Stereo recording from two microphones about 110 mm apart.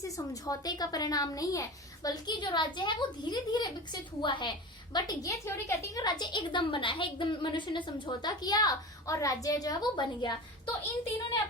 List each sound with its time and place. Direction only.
0.0 s a woman's voice: 35° left (ahead or behind)
4.9 s a woman's voice: 35° left (ahead or behind)